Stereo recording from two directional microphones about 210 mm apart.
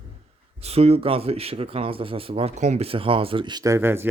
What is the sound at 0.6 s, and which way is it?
Speech, 30° right (ahead or behind).